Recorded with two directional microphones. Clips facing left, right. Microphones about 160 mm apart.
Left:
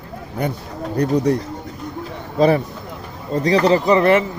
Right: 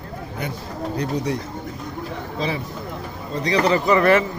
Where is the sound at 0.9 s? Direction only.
60° left (ahead or behind).